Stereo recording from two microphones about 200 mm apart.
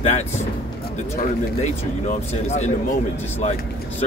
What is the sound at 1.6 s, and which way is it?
Speech, 35° left (ahead or behind).